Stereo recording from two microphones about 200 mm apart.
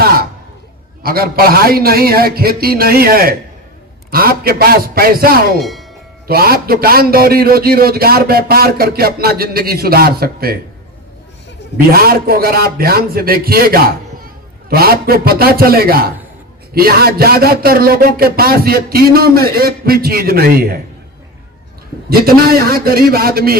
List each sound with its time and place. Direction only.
0.0 s a sound: 50° right (ahead or behind)
1.0 s a man's voice: 50° right (ahead or behind)
5.5 s speech: centre (ahead or behind)
6.2 s a man's voice: 50° right (ahead or behind)
11.9 s a man's voice: 50° right (ahead or behind)
22.4 s a man's voice: 50° right (ahead or behind)